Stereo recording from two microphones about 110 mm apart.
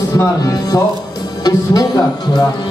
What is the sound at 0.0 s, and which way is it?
Speech, 35° left (ahead or behind).